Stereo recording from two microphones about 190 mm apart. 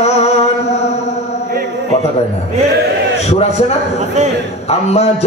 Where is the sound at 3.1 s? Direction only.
35° left (ahead or behind).